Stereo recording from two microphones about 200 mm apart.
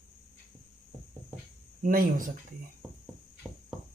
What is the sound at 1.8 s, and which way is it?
Speech, 45° right (ahead or behind).